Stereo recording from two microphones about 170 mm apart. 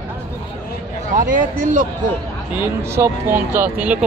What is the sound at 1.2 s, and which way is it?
Speech, 50° right (ahead or behind).